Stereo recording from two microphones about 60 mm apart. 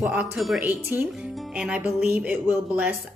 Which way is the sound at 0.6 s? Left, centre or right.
Right.